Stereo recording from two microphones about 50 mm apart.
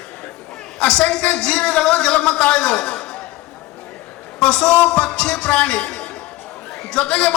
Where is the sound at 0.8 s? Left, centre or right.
Centre.